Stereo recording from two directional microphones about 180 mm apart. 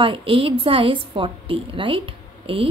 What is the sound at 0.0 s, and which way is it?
A woman's voice, 30° right (ahead or behind).